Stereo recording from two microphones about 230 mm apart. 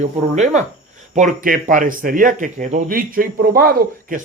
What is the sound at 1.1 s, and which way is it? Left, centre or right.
Speech, right.